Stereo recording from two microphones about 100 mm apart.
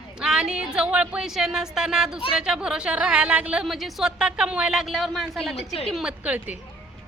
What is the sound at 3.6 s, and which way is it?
A woman's voice, centre (ahead or behind).